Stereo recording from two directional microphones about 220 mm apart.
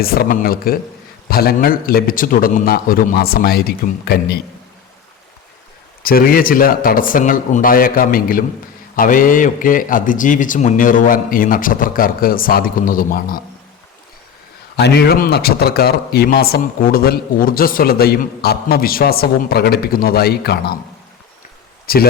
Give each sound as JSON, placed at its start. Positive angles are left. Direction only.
{"t": 0.0, "sound": "speech", "side_deg": 45}
{"t": 6.0, "sound": "a man's voice", "side_deg": 40}
{"t": 14.8, "sound": "speech", "side_deg": 50}
{"t": 21.9, "sound": "speech", "side_deg": 45}